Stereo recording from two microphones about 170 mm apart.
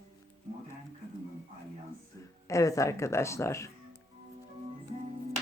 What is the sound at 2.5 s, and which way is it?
Speech, 20° left (ahead or behind).